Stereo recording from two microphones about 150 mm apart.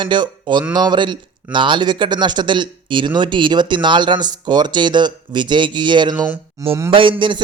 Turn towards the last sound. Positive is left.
turn(degrees=-35)  # may be behind; listen again after turning